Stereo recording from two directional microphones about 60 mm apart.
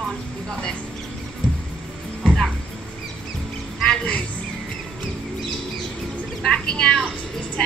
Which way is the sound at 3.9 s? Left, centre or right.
Centre.